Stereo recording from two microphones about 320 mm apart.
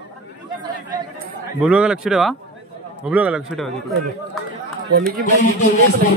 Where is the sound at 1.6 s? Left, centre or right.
Centre.